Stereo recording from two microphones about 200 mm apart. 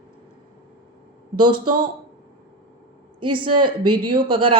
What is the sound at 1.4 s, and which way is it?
Speech, 25° right (ahead or behind).